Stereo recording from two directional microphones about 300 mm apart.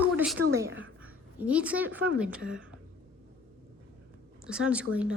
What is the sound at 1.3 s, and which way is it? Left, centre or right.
A woman's voice, centre.